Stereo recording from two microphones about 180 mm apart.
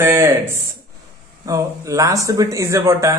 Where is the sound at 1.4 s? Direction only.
20° right (ahead or behind).